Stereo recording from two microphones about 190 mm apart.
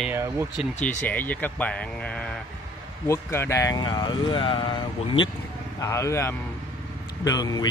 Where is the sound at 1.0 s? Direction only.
10° left (ahead or behind); by 5.3 s 25° left (ahead or behind).